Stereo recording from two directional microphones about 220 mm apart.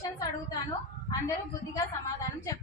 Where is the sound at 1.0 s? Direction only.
15° left (ahead or behind).